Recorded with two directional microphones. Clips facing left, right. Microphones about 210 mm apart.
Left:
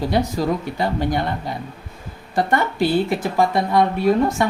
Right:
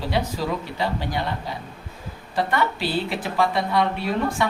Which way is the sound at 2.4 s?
50° left (ahead or behind).